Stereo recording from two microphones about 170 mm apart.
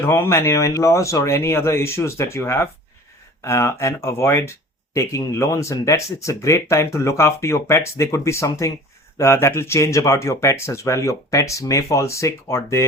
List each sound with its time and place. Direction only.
0.0 s speech: 15° left (ahead or behind)